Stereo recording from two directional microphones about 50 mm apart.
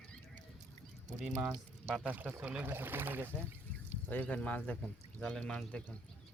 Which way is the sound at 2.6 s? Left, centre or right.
Right.